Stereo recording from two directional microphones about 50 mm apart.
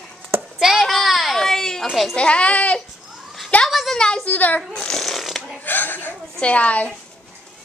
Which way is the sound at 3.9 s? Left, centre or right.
Centre.